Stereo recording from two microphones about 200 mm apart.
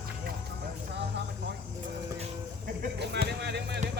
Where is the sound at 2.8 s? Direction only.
55° right (ahead or behind).